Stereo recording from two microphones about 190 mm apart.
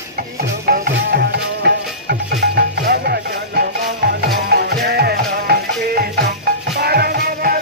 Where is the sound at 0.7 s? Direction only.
55° right (ahead or behind).